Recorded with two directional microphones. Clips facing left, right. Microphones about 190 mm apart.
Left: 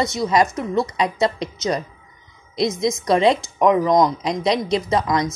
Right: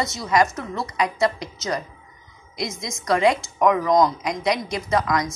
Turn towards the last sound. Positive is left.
turn(degrees=25)  # may be behind; listen again after turning